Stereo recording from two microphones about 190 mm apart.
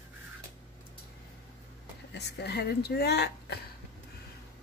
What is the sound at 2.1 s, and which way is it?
Speech, 60° left (ahead or behind).